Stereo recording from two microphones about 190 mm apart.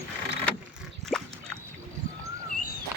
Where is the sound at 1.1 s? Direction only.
Centre (ahead or behind).